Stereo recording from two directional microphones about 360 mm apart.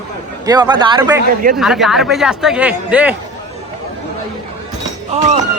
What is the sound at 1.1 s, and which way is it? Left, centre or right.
Speech, right.